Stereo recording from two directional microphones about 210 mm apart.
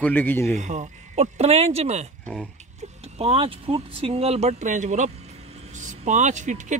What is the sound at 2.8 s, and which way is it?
Speech, 30° right (ahead or behind).